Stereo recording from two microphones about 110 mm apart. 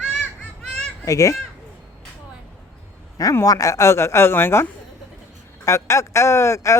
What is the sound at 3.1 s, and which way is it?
A man's voice, 30° left (ahead or behind).